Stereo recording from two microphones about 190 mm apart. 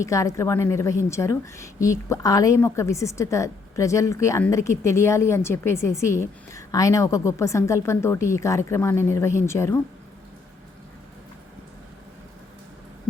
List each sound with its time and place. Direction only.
0.0 s a woman's voice: 15° left (ahead or behind)